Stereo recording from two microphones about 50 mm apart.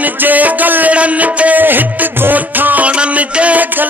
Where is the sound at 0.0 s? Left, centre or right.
Right.